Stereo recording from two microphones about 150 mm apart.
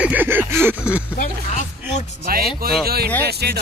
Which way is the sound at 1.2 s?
55° left (ahead or behind).